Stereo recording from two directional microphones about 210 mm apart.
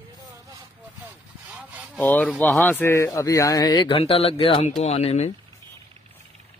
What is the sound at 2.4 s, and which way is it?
Speech, 5° left (ahead or behind).